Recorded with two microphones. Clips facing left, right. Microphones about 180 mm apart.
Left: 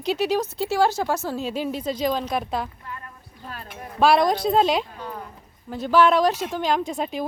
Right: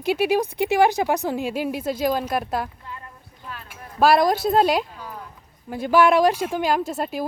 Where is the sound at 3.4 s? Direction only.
40° left (ahead or behind).